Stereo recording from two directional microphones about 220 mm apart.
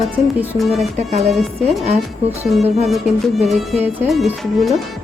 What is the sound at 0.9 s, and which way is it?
Speech, 30° right (ahead or behind).